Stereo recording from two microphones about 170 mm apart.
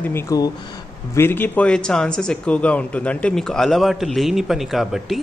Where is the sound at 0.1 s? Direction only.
20° left (ahead or behind).